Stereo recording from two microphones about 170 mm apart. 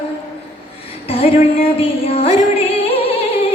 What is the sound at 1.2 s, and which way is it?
Music, 35° left (ahead or behind).